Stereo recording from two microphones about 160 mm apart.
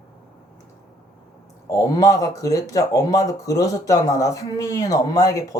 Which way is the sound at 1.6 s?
20° left (ahead or behind).